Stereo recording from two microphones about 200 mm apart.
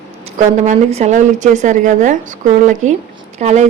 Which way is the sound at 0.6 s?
35° right (ahead or behind).